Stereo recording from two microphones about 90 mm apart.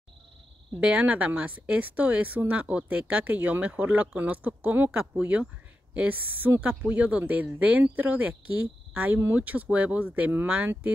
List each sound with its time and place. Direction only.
0.7 s speech: 15° right (ahead or behind)